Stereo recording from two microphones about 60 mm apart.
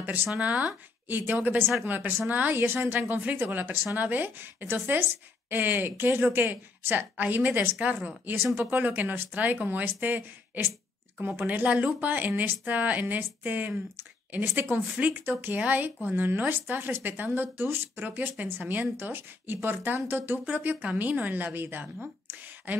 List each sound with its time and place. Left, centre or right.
0.0 s speech: right
2.5 s speech: right